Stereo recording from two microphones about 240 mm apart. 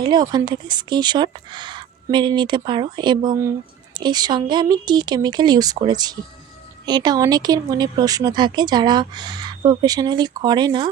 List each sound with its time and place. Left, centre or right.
0.0 s speech: centre